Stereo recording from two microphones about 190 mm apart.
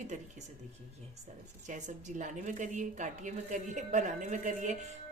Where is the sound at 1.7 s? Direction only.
40° right (ahead or behind).